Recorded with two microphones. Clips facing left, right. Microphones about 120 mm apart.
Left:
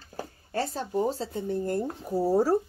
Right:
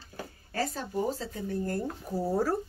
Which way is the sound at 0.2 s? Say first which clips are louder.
Left 2 dB; 30° left (ahead or behind).